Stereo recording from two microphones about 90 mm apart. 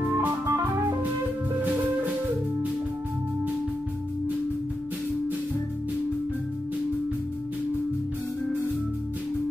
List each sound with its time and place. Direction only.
0.2 s music: 25° right (ahead or behind)